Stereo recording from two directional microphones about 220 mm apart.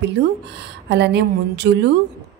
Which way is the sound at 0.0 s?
50° right (ahead or behind).